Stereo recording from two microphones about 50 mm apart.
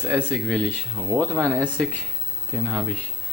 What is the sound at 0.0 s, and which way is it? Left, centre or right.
Speech, right.